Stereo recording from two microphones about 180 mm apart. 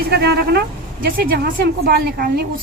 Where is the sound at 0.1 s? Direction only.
65° right (ahead or behind).